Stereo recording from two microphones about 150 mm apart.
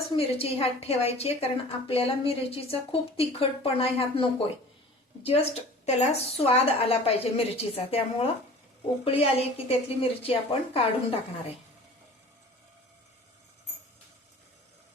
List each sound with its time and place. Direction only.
0.1 s a woman's voice: 40° left (ahead or behind)